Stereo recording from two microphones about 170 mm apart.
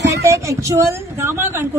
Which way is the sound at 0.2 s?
20° right (ahead or behind).